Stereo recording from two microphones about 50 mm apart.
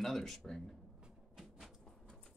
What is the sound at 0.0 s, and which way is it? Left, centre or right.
Speech, centre.